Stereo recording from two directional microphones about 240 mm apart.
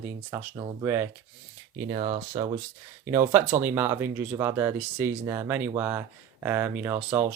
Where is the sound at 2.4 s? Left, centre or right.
Centre.